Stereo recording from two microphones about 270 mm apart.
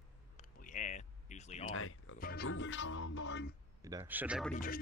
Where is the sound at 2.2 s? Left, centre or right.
Left.